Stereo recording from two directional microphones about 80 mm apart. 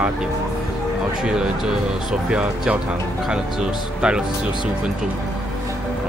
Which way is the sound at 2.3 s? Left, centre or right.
Centre.